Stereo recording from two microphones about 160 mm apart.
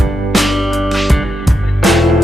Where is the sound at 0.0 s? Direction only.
Centre (ahead or behind).